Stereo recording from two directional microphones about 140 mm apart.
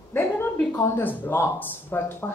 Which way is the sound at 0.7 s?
15° left (ahead or behind).